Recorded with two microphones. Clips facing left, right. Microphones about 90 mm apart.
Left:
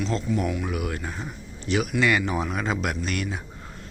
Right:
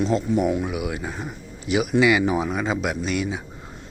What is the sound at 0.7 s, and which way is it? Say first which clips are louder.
Speech: right 2 dB; 5° right (ahead or behind).